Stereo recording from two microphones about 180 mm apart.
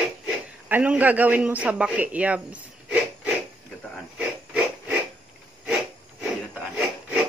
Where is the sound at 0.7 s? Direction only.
10° right (ahead or behind).